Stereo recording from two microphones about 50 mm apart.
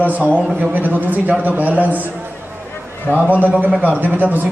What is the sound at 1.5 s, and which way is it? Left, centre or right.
Speech, right.